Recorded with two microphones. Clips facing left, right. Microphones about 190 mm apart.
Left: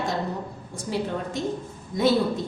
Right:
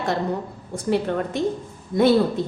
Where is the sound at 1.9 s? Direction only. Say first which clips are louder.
Right 5 dB; 60° right (ahead or behind).